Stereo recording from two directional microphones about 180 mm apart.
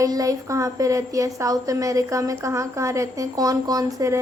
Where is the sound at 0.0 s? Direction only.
20° right (ahead or behind).